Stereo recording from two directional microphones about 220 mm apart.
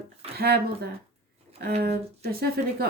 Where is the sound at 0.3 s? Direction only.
45° right (ahead or behind).